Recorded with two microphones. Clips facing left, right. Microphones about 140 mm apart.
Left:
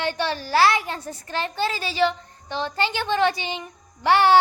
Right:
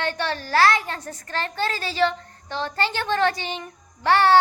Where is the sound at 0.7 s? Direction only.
15° left (ahead or behind).